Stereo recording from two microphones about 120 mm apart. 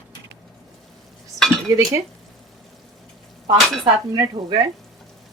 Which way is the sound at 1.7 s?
25° right (ahead or behind).